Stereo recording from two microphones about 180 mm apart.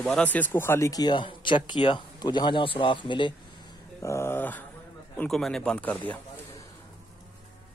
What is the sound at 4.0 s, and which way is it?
Speech, 15° left (ahead or behind).